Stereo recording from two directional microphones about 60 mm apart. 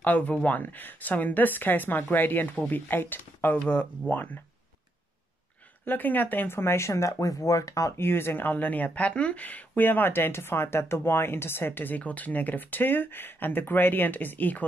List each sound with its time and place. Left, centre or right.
0.0 s speech: left
5.9 s speech: left
8.0 s speech: left